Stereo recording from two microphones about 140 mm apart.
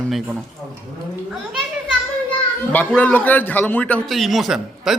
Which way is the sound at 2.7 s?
10° left (ahead or behind).